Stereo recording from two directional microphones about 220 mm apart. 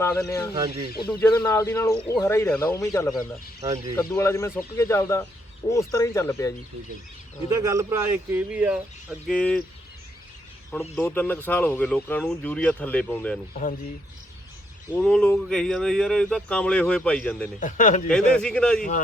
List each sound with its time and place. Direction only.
0.0 s speech: 15° left (ahead or behind)
0.5 s speech: 15° right (ahead or behind)
1.0 s speech: 10° left (ahead or behind)
3.6 s speech: 15° right (ahead or behind)
3.9 s speech: 10° left (ahead or behind)
7.6 s speech: 15° right (ahead or behind); by 9.6 s 5° left (ahead or behind)
10.9 s speech: 5° left (ahead or behind)
14.9 s speech: 5° left (ahead or behind)
17.6 s speech: 35° left (ahead or behind)
18.1 s speech: 5° left (ahead or behind)